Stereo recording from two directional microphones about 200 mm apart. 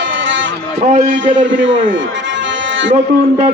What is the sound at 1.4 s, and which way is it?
Speech, 70° right (ahead or behind).